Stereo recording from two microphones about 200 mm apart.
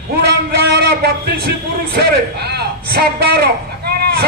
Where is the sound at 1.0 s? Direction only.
50° right (ahead or behind).